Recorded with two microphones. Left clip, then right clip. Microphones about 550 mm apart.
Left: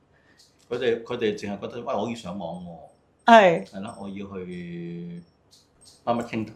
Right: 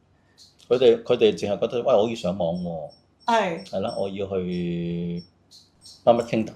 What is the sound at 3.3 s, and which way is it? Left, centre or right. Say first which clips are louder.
Speech: left 8 dB; left.